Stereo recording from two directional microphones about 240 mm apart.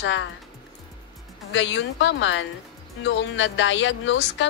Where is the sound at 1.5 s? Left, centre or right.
Left.